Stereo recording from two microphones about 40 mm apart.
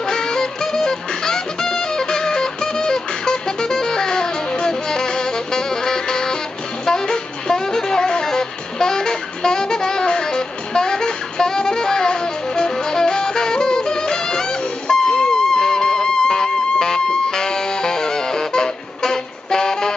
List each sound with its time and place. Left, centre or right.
0.0 s music: centre
6.9 s saxophone: centre
14.9 s music: centre